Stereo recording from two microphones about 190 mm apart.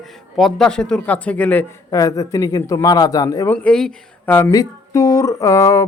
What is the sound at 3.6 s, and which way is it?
Speech, 5° left (ahead or behind).